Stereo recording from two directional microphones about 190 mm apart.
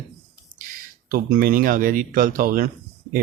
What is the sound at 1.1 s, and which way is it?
Speech, 50° right (ahead or behind).